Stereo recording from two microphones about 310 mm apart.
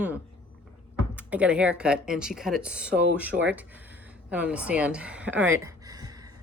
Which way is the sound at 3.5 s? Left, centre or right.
Centre.